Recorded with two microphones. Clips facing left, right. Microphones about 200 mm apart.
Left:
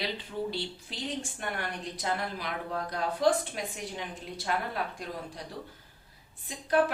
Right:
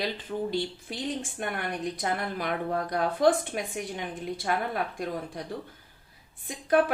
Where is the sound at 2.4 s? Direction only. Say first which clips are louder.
Right 6 dB; 55° right (ahead or behind).